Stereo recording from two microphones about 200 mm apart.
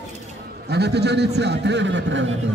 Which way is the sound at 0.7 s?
55° right (ahead or behind).